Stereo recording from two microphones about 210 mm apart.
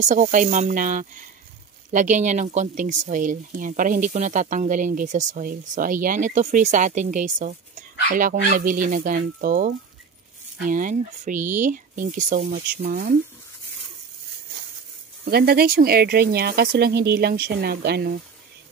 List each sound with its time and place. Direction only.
0.0 s speech: 35° right (ahead or behind)
10.7 s speech: 40° right (ahead or behind)
15.2 s speech: 45° right (ahead or behind)